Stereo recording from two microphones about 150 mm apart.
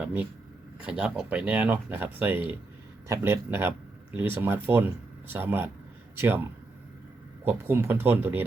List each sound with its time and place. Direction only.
0.0 s speech: 10° right (ahead or behind)
7.4 s speech: 15° right (ahead or behind)